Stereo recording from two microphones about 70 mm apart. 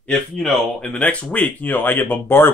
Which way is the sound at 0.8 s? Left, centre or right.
Centre.